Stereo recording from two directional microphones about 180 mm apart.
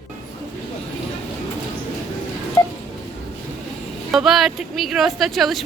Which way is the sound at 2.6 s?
15° left (ahead or behind).